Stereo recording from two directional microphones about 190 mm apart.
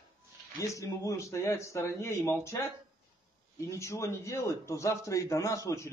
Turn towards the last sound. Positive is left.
turn(degrees=15)  # may be behind; listen again after turning